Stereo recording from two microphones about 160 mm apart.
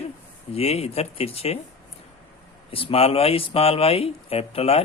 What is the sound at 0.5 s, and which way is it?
Speech, 40° left (ahead or behind).